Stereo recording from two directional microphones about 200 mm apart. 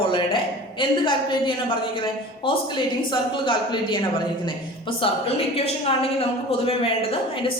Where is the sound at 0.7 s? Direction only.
25° left (ahead or behind).